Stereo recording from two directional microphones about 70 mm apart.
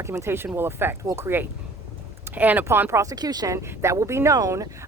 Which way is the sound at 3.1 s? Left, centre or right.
Right.